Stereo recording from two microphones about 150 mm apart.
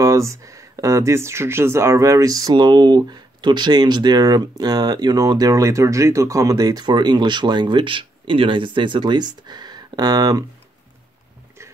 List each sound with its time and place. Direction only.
0.0 s speech: 20° right (ahead or behind)